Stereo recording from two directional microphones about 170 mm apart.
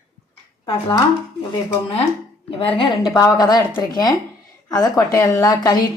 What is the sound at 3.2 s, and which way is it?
Speech, 20° left (ahead or behind).